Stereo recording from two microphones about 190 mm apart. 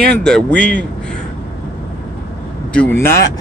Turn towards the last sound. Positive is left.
turn(degrees=15)  # may be behind; listen again after turning